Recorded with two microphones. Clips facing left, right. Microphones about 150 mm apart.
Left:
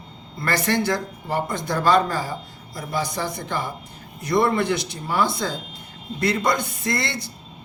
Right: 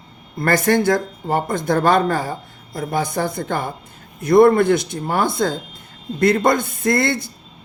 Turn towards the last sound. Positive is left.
turn(degrees=-50)  # may be behind; listen again after turning